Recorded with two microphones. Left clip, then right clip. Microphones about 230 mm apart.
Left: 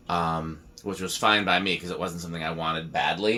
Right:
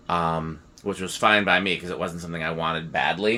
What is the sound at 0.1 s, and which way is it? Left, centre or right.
Speech, right.